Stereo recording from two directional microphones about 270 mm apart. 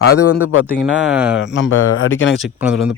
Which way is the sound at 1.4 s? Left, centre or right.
Left.